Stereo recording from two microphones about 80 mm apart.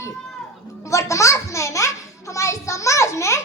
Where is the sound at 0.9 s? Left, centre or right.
Left.